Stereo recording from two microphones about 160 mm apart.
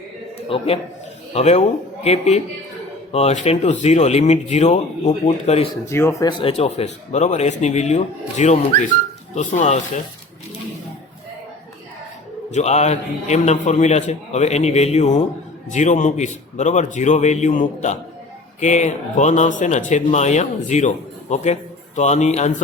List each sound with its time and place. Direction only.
0.4 s a man's voice: 35° left (ahead or behind)
5.8 s speech: 15° left (ahead or behind); by 10.0 s 45° left (ahead or behind)
12.5 s speech: 45° left (ahead or behind)